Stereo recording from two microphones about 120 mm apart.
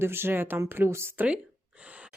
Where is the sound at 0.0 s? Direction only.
20° right (ahead or behind).